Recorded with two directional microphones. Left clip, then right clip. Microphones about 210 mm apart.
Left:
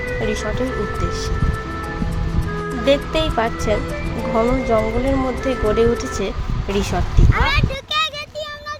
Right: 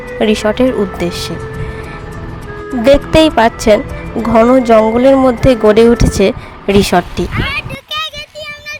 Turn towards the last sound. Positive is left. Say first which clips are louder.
# right 1 dB
turn(degrees=15)  # may be behind; listen again after turning